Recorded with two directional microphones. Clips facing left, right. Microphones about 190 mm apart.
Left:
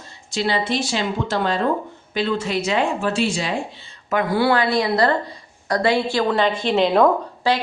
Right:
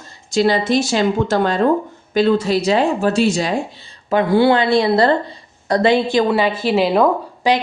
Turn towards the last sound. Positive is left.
turn(degrees=-15)  # may be behind; listen again after turning